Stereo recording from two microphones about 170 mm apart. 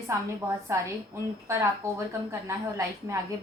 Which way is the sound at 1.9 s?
15° right (ahead or behind).